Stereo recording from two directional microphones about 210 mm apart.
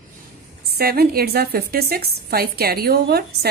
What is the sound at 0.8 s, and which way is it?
A woman's voice, 45° right (ahead or behind).